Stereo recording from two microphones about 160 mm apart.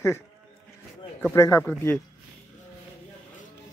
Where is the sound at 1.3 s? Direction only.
20° left (ahead or behind).